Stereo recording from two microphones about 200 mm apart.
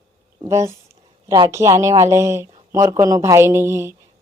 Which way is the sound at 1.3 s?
20° right (ahead or behind).